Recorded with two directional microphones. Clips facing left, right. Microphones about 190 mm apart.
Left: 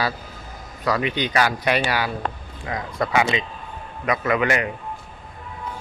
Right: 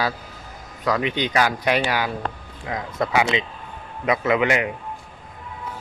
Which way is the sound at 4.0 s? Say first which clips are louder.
Right 2 dB; 20° right (ahead or behind).